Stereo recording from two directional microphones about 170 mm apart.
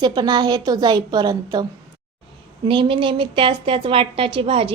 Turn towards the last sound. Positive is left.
turn(degrees=-35)  # may be behind; listen again after turning